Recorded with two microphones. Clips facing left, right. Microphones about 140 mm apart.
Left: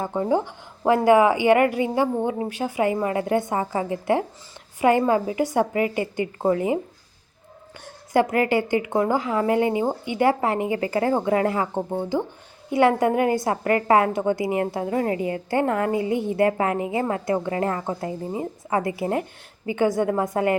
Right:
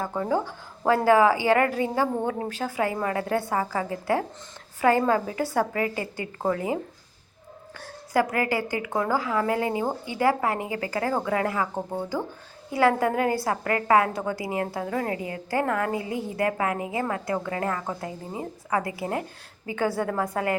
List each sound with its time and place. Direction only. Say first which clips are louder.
0.0 s a woman's voice: left 3 dB; 20° left (ahead or behind)
8.1 s a woman's voice: left 4 dB; 25° left (ahead or behind)